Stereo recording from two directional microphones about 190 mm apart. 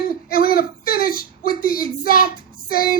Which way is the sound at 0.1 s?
50° left (ahead or behind).